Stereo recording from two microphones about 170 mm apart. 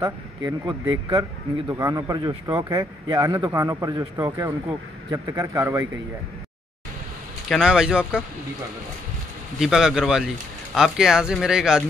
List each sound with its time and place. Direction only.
0.0 s speech: 25° right (ahead or behind)
1.7 s a man's voice: 20° right (ahead or behind)
7.4 s speech: 5° right (ahead or behind)
9.6 s speech: 5° right (ahead or behind)